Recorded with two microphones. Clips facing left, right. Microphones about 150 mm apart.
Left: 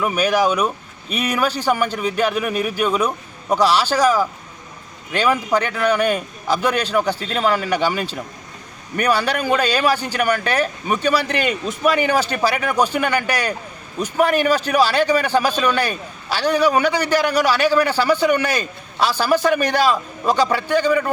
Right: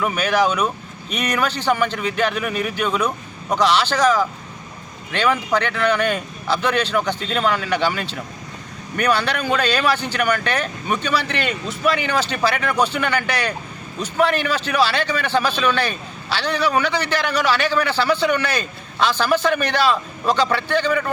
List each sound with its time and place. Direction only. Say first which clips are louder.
0.0 s a man's voice: left 1 dB; 10° left (ahead or behind)